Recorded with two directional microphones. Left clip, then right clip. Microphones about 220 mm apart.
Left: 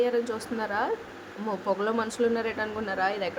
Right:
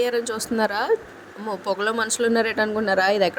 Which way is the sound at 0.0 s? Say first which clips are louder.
Right 3 dB; 30° right (ahead or behind).